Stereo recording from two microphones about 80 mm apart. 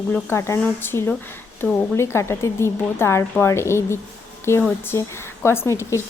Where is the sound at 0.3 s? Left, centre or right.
Left.